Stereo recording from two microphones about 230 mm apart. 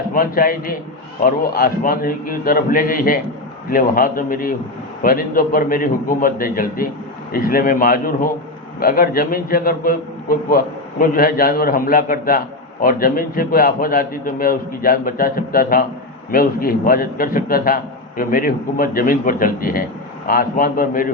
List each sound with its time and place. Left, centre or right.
0.1 s a man's voice: left